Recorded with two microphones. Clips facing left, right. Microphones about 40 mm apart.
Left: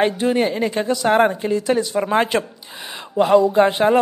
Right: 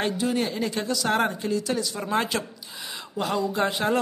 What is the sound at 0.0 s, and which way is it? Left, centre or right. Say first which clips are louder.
Speech: left 8 dB; left.